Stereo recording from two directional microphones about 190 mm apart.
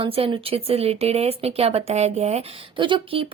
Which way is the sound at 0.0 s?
30° right (ahead or behind).